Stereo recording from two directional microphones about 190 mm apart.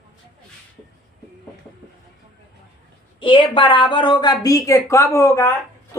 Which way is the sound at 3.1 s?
25° left (ahead or behind).